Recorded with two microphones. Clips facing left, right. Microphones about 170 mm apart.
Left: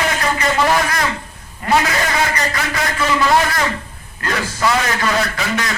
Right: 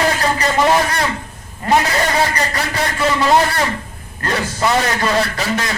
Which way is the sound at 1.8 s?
35° right (ahead or behind).